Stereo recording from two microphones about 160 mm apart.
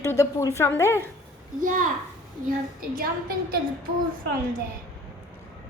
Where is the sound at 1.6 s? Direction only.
55° right (ahead or behind).